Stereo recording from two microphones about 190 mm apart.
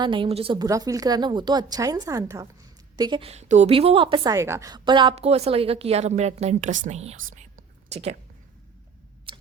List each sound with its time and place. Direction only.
0.0 s a woman's voice: 25° right (ahead or behind)